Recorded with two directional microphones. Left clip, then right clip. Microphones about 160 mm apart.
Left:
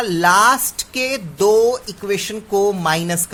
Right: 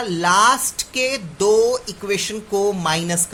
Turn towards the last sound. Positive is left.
turn(degrees=40)  # may be behind; listen again after turning